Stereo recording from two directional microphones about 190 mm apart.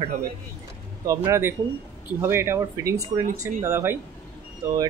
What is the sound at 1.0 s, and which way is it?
Speech, 15° right (ahead or behind).